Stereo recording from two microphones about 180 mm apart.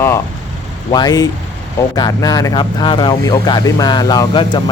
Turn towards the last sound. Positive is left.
turn(degrees=25)  # may be behind; listen again after turning